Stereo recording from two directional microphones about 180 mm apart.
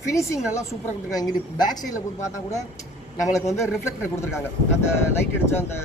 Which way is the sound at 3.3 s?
15° left (ahead or behind).